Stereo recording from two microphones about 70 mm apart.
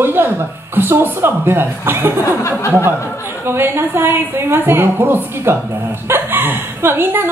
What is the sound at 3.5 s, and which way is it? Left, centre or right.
A woman's voice, right.